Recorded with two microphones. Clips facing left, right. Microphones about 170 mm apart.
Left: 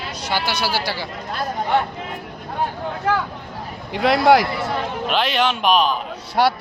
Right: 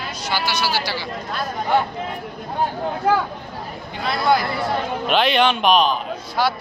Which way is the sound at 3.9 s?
90° left.